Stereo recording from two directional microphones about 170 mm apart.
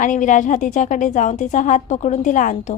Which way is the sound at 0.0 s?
50° left (ahead or behind).